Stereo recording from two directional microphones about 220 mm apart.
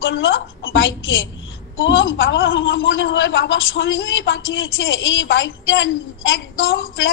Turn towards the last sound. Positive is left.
turn(degrees=60)  # may be behind; listen again after turning